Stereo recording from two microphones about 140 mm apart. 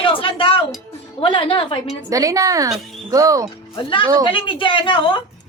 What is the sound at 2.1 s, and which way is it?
Speech, 25° right (ahead or behind).